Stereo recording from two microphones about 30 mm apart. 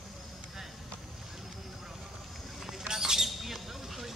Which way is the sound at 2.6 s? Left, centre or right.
Centre.